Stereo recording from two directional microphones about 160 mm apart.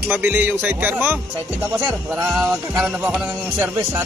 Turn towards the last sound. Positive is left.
turn(degrees=-10)  # may be behind; listen again after turning